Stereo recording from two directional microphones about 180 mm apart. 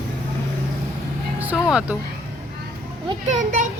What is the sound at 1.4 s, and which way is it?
Music, 5° right (ahead or behind).